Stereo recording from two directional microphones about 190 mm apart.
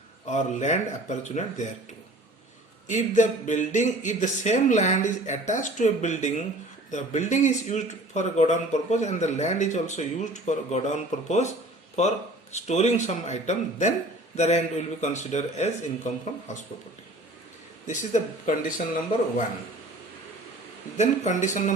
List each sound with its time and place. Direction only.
0.3 s speech: 40° left (ahead or behind)
2.8 s speech: 40° left (ahead or behind)
17.8 s speech: 40° left (ahead or behind)
21.0 s speech: 40° left (ahead or behind)